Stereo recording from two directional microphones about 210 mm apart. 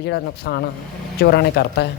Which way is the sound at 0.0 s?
50° left (ahead or behind).